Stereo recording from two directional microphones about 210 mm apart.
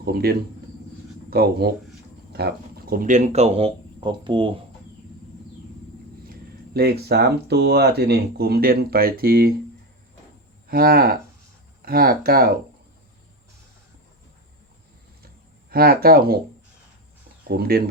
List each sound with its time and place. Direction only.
0.0 s speech: 45° right (ahead or behind); by 4.5 s 25° right (ahead or behind)
6.7 s speech: 50° right (ahead or behind)
10.7 s speech: 45° right (ahead or behind)
15.7 s speech: 45° right (ahead or behind)
17.5 s speech: 45° right (ahead or behind)